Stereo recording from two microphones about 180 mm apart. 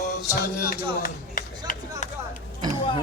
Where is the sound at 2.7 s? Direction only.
30° left (ahead or behind).